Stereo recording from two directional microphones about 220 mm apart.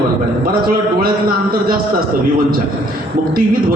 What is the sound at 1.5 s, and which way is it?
Speech, 40° right (ahead or behind).